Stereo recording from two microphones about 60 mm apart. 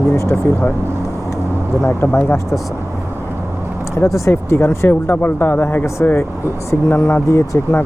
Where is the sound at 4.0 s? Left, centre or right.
Left.